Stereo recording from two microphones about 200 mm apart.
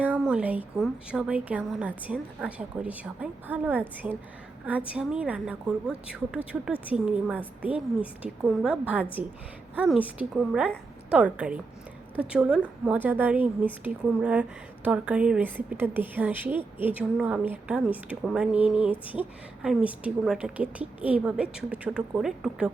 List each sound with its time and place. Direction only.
0.0 s a woman's voice: 5° right (ahead or behind)